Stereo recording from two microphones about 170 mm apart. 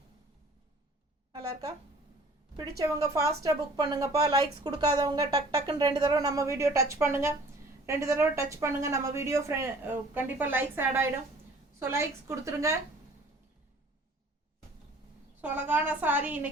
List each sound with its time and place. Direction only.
2.6 s a woman's voice: 20° right (ahead or behind)
15.4 s a woman's voice: 10° right (ahead or behind)